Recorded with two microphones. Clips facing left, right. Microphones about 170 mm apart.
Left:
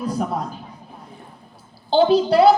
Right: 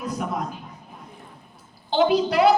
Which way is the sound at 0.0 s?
30° left (ahead or behind).